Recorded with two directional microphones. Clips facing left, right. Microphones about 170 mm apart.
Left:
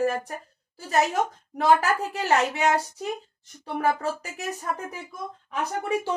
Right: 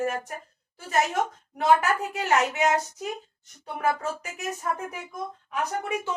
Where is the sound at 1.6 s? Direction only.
35° left (ahead or behind).